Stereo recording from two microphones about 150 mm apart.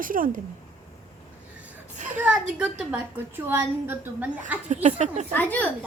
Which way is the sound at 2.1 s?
10° right (ahead or behind).